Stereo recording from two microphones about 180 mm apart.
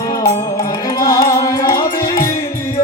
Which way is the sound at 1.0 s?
20° left (ahead or behind).